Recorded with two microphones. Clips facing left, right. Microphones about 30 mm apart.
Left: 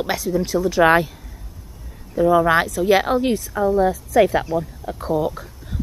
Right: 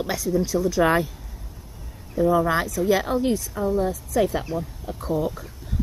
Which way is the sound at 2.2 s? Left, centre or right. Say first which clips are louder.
Left 4 dB; left.